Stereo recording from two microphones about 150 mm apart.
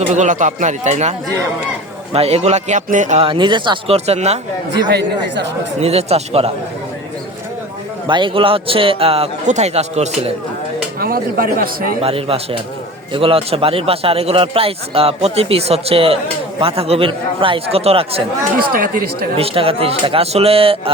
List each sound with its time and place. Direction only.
0.1 s a man's voice: 55° right (ahead or behind)
2.1 s a man's voice: 45° right (ahead or behind)
3.2 s a man's voice: 30° right (ahead or behind)
3.9 s a man's voice: 45° right (ahead or behind)
5.8 s a man's voice: 45° right (ahead or behind)
8.0 s a man's voice: 35° right (ahead or behind)
11.0 s speech: 80° right
12.0 s a man's voice: 40° right (ahead or behind)
18.7 s speech: 70° right (ahead or behind)
19.4 s a man's voice: 40° right (ahead or behind)